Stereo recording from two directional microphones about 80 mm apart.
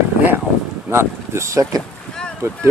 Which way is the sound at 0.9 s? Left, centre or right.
Right.